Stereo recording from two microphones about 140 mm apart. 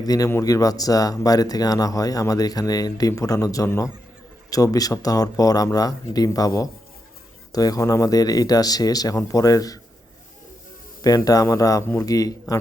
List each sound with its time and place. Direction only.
0.0 s speech: 25° left (ahead or behind)
11.3 s speech: 25° left (ahead or behind)